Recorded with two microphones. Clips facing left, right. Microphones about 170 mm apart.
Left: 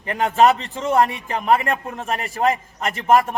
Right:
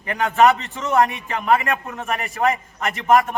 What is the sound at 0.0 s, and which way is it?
A man's voice, 30° left (ahead or behind).